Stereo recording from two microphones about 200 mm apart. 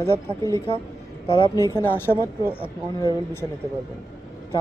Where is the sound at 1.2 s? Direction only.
25° left (ahead or behind).